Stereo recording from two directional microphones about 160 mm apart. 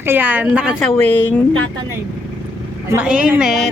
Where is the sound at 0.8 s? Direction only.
10° left (ahead or behind).